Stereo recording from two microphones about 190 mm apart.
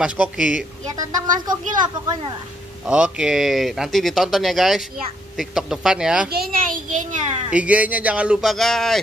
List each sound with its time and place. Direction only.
0.0 s speech: 5° right (ahead or behind)
0.9 s speech: 20° right (ahead or behind)
2.8 s speech: 5° right (ahead or behind)
6.3 s a child's voice: 50° right (ahead or behind)
7.5 s speech: 5° right (ahead or behind)